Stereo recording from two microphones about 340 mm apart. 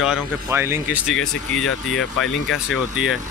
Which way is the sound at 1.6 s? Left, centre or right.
Left.